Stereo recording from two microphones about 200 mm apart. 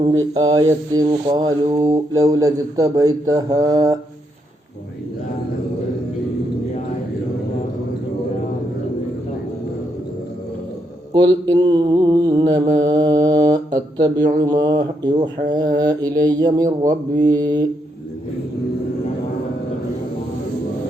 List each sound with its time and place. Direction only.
0.0 s mantra: 20° right (ahead or behind)
11.1 s mantra: 20° right (ahead or behind)